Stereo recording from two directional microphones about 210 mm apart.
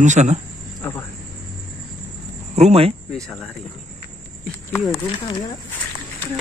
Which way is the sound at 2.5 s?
30° right (ahead or behind).